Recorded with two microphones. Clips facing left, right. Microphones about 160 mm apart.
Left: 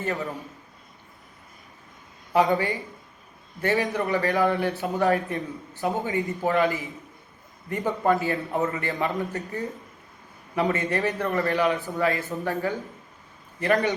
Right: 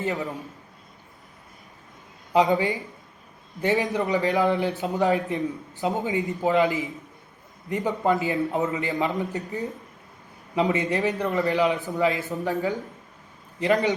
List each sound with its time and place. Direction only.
0.0 s a man's voice: 20° right (ahead or behind)
2.3 s a man's voice: 20° right (ahead or behind)